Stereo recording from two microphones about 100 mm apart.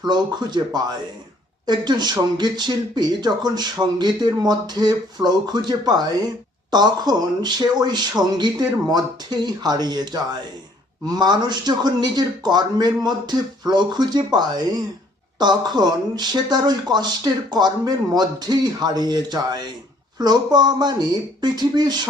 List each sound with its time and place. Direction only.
0.0 s speech: 45° right (ahead or behind)